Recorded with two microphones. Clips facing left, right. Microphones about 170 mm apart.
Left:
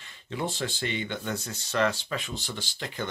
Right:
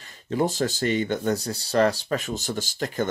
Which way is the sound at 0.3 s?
40° right (ahead or behind).